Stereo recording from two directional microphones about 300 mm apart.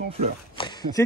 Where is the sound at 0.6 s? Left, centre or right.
Centre.